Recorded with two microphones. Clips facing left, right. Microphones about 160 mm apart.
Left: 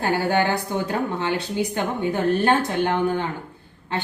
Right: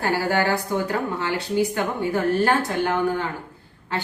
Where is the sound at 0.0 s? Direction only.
20° left (ahead or behind).